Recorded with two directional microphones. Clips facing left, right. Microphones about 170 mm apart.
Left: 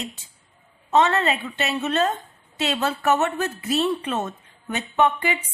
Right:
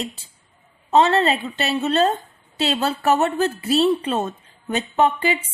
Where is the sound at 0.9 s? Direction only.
35° right (ahead or behind).